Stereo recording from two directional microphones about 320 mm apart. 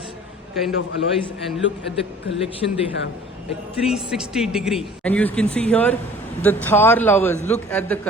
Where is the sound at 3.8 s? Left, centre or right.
Centre.